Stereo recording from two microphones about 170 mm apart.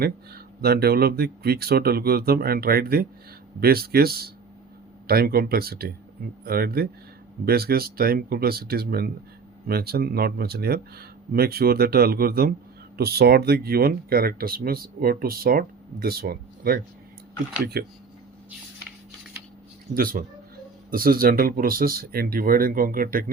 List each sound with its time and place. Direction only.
0.0 s speech: 65° right (ahead or behind)
19.9 s speech: 55° right (ahead or behind)